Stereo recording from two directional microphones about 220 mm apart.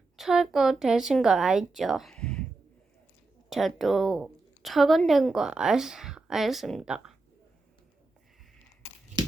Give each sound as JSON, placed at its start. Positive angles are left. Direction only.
{"t": 0.2, "sound": "a woman's voice", "side_deg": 0}
{"t": 3.5, "sound": "a woman's voice", "side_deg": 0}
{"t": 9.2, "sound": "crumpling", "side_deg": -20}